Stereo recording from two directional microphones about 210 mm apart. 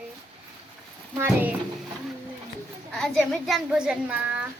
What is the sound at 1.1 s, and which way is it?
Speech, 10° right (ahead or behind).